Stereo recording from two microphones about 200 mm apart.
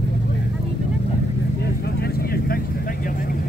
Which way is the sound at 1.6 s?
55° left (ahead or behind).